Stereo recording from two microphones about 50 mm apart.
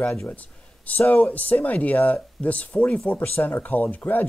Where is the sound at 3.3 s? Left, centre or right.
Left.